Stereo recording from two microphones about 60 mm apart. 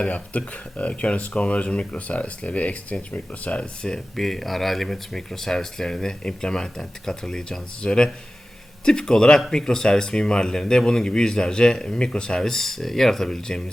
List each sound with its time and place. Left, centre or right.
0.1 s speech: left
3.8 s speech: centre